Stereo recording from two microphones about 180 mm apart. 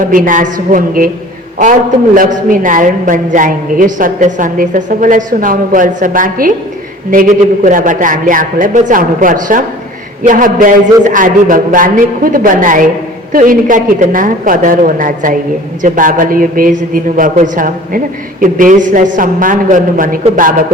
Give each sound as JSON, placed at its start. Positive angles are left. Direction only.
{"t": 0.0, "sound": "a woman's voice", "side_deg": -50}
{"t": 2.1, "sound": "a woman's voice", "side_deg": -50}